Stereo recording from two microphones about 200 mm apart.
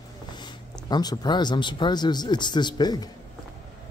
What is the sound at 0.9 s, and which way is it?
Speech, 20° left (ahead or behind).